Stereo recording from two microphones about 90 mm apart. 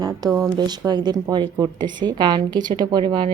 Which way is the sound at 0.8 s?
50° right (ahead or behind).